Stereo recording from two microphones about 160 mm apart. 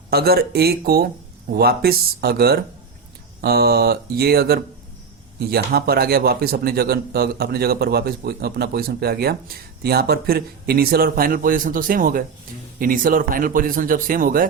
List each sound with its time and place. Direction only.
0.1 s a man's voice: 75° right (ahead or behind); by 14.4 s 60° right (ahead or behind)